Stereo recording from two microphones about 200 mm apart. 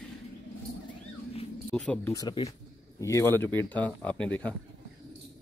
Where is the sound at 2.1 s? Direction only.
20° left (ahead or behind); by 4.6 s 5° left (ahead or behind).